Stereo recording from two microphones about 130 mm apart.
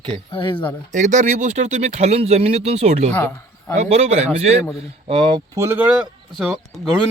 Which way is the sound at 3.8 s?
60° right (ahead or behind).